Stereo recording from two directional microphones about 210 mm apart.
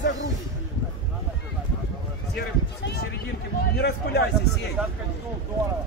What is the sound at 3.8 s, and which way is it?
Speech, 50° left (ahead or behind).